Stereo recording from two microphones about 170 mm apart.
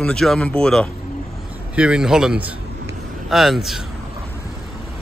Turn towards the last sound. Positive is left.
turn(degrees=0)  # may be behind; listen again after turning